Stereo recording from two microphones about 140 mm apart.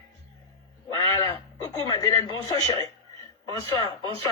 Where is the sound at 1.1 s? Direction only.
30° left (ahead or behind).